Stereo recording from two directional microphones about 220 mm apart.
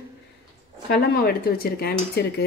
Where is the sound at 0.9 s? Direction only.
45° left (ahead or behind).